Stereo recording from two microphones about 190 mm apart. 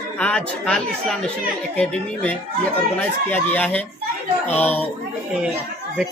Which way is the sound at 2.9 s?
10° left (ahead or behind).